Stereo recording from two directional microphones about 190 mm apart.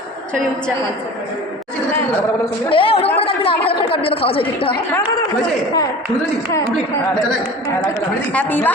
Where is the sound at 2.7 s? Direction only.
30° left (ahead or behind).